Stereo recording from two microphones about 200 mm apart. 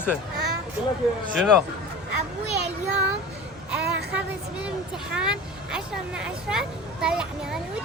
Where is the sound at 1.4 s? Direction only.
5° left (ahead or behind).